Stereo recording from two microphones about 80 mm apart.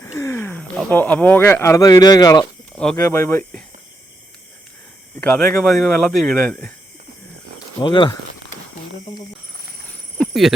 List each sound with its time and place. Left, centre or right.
0.0 s a sound: left
0.9 s speech: left
1.8 s speech: left
2.9 s speech: left
5.2 s speech: centre
6.3 s speech: centre
7.8 s speech: left
10.2 s a sound: centre